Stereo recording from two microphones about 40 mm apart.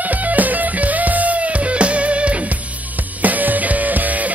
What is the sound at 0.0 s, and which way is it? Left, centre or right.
Music, right.